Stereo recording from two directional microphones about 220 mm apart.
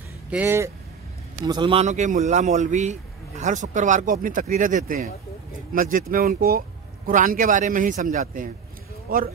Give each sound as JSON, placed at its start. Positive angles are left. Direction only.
{"t": 0.3, "sound": "speech", "side_deg": -10}
{"t": 1.4, "sound": "a man's voice", "side_deg": -20}